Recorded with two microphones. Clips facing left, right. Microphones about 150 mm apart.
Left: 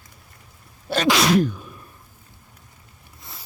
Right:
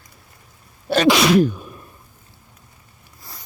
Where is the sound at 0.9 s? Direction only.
70° right (ahead or behind).